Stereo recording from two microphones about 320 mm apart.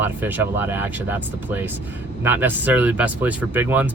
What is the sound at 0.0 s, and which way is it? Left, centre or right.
Speech, centre.